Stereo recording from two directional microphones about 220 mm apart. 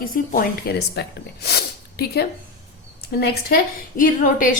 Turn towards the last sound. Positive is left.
turn(degrees=35)  # may be behind; listen again after turning